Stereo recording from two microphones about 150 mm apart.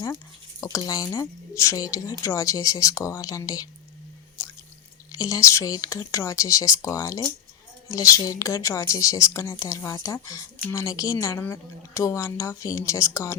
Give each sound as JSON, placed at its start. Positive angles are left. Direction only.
{"t": 0.6, "sound": "speech", "side_deg": 25}
{"t": 5.1, "sound": "speech", "side_deg": 20}